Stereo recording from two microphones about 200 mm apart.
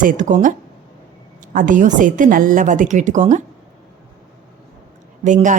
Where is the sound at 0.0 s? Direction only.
40° right (ahead or behind).